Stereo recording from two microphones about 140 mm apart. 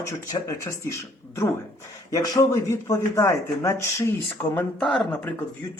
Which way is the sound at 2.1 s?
25° left (ahead or behind).